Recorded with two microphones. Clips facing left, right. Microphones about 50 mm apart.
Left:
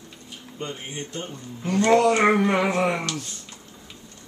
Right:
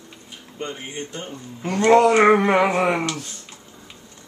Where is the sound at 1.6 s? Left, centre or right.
Right.